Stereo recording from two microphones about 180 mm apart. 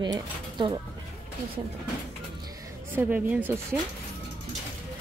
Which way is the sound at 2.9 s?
10° right (ahead or behind).